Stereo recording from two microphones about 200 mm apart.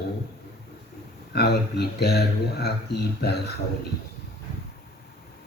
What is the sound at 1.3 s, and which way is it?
Speech, 55° left (ahead or behind).